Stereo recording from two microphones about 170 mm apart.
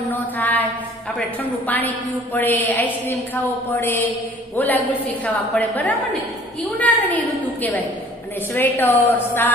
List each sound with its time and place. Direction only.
0.1 s mantra: 10° left (ahead or behind)
2.3 s a woman's voice: 10° left (ahead or behind)
8.5 s a woman's voice: 10° left (ahead or behind)